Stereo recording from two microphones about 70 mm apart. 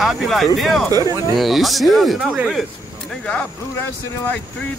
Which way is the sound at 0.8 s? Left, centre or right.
Right.